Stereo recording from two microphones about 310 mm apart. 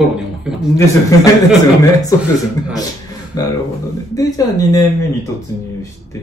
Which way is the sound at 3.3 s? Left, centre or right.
Centre.